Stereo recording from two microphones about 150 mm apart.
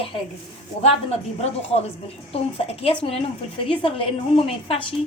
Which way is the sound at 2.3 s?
40° left (ahead or behind).